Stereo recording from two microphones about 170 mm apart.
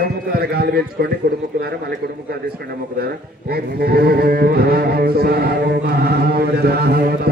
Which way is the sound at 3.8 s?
65° right (ahead or behind).